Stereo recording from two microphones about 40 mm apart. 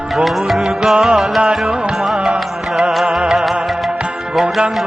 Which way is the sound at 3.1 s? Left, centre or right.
Centre.